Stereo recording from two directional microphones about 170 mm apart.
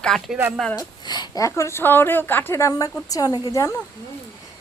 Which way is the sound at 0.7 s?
25° left (ahead or behind).